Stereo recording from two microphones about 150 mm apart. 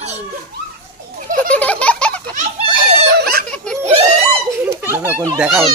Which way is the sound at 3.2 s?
90° right.